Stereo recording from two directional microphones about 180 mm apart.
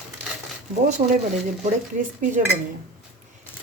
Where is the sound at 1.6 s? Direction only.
45° right (ahead or behind).